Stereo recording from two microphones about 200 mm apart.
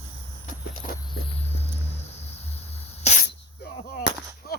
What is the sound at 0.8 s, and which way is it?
Walk, 40° left (ahead or behind).